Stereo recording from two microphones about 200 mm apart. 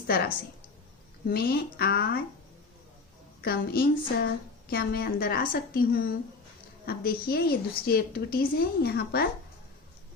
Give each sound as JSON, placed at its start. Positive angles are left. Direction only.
{"t": 1.3, "sound": "a woman's voice", "side_deg": 50}
{"t": 3.4, "sound": "a woman's voice", "side_deg": 50}